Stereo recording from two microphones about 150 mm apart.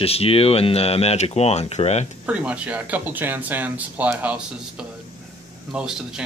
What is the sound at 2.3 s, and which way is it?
Speech, 10° right (ahead or behind).